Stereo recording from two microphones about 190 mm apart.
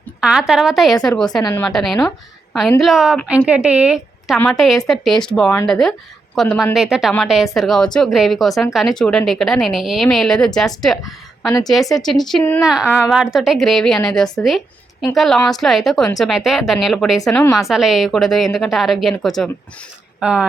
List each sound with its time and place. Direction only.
0.2 s a woman's voice: 5° right (ahead or behind)
11.4 s a woman's voice: 20° left (ahead or behind)
11.7 s a woman's voice: centre (ahead or behind)
12.6 s a woman's voice: 5° right (ahead or behind)